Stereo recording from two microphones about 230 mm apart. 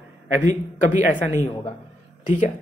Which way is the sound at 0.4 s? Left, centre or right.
Left.